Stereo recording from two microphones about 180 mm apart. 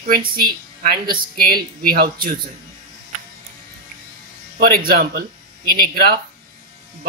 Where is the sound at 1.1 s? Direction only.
55° right (ahead or behind).